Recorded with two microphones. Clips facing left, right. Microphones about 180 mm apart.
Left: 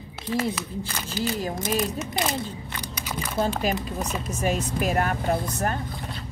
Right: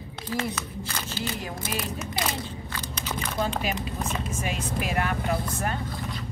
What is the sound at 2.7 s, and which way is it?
Crunch, 15° left (ahead or behind).